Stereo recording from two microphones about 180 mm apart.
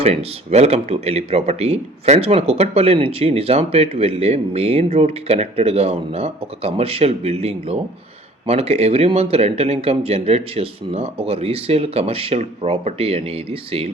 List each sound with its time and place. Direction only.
0.0 s speech: 35° right (ahead or behind)